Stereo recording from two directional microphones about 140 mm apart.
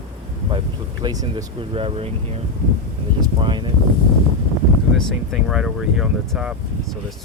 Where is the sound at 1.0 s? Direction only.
25° right (ahead or behind).